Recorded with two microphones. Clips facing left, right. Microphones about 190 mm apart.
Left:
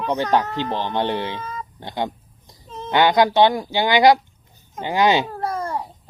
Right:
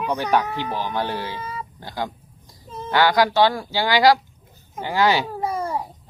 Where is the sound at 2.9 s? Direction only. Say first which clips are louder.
Left 2 dB; 20° left (ahead or behind).